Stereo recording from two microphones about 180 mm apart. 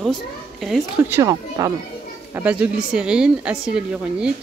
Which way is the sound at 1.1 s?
15° right (ahead or behind).